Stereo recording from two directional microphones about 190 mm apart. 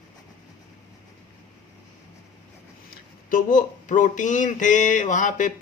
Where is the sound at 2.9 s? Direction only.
45° left (ahead or behind).